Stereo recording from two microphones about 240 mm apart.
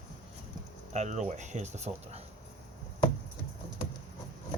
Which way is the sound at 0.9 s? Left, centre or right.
Right.